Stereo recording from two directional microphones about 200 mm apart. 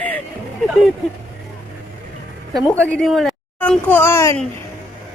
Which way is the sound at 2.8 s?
5° left (ahead or behind).